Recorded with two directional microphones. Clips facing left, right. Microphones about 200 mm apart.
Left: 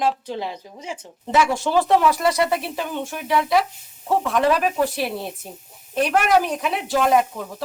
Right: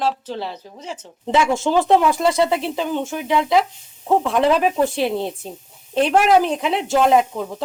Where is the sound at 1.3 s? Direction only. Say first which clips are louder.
Right 2 dB; 25° right (ahead or behind).